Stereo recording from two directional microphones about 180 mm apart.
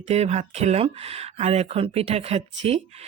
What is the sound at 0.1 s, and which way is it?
Speech, 35° right (ahead or behind).